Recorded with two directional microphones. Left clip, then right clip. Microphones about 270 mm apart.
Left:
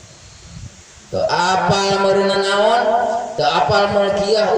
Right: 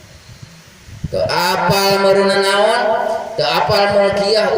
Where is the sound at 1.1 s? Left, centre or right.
Right.